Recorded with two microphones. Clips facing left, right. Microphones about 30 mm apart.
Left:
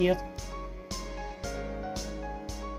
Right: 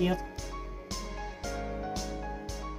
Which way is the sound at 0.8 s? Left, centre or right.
Centre.